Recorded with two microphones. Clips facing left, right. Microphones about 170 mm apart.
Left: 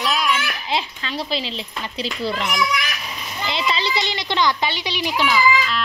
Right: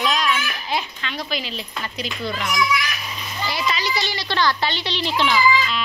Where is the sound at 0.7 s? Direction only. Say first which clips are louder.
Left 2 dB; 30° left (ahead or behind).